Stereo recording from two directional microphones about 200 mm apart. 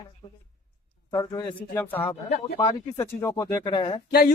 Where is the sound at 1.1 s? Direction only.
20° left (ahead or behind).